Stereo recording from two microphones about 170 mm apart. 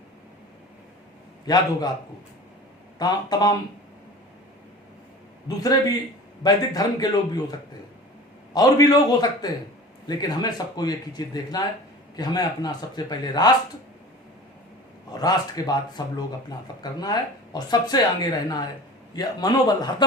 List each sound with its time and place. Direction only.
1.5 s speech: 20° left (ahead or behind)
3.0 s speech: 25° left (ahead or behind)
5.5 s speech: 20° left (ahead or behind)
8.5 s speech: 20° left (ahead or behind)
15.1 s speech: 25° left (ahead or behind)